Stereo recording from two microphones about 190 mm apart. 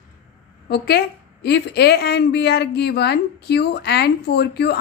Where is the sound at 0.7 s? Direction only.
55° left (ahead or behind).